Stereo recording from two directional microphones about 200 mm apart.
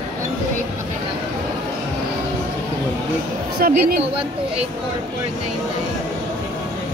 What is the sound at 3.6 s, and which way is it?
Speech, 45° right (ahead or behind).